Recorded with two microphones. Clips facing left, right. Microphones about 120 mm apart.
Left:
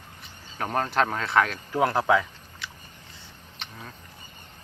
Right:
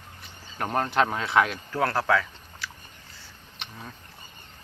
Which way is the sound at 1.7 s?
15° left (ahead or behind).